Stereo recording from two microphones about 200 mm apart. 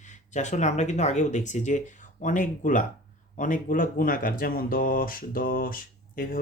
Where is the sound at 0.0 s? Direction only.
35° left (ahead or behind).